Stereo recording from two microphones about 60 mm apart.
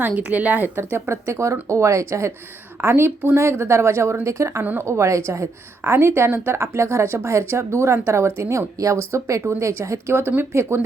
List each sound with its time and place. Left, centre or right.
0.2 s speech: right
2.8 s speech: right
5.8 s speech: right